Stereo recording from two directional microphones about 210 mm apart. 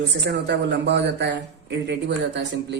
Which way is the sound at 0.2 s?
55° right (ahead or behind).